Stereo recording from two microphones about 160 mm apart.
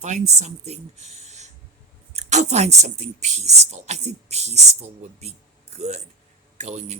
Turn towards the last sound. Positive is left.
turn(degrees=-45)  # may be behind; listen again after turning